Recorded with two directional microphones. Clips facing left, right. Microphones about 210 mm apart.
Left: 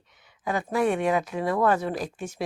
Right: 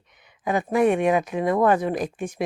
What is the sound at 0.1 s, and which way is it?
Speech, 15° right (ahead or behind).